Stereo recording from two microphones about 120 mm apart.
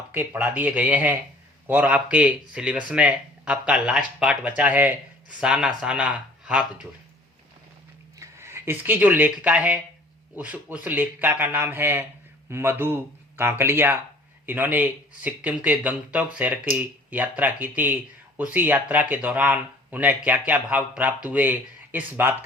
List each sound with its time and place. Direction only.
0.1 s speech: 15° right (ahead or behind)
8.2 s speech: 20° right (ahead or behind)